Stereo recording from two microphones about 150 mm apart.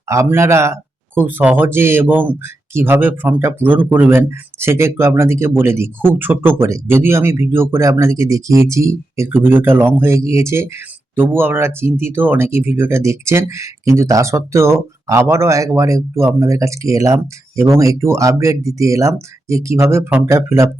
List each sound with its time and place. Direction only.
0.1 s speech: 20° right (ahead or behind)